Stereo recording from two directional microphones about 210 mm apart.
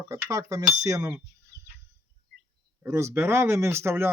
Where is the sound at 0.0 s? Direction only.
15° right (ahead or behind).